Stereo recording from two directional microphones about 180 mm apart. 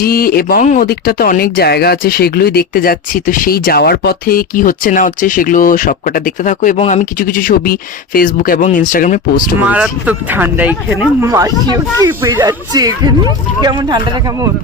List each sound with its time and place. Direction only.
0.0 s speech: 55° left (ahead or behind)
9.6 s speech: 5° right (ahead or behind)
11.2 s speech: 20° right (ahead or behind)